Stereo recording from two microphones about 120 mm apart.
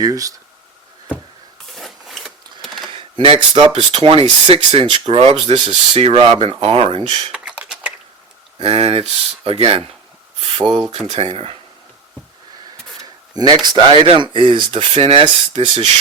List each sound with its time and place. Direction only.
0.0 s speech: 30° right (ahead or behind)
1.7 s printer: centre (ahead or behind)
2.9 s a sound: 45° right (ahead or behind)
3.3 s speech: 45° right (ahead or behind)
7.3 s a sound: 10° right (ahead or behind)
8.5 s speech: 55° right (ahead or behind)
10.4 s a sound: 60° right (ahead or behind)
10.9 s speech: 55° right (ahead or behind)
13.3 s speech: 35° right (ahead or behind)
13.9 s speech: 45° right (ahead or behind)